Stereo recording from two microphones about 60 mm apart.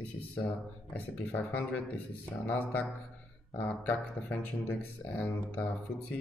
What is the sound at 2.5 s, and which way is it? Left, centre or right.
Speech, left.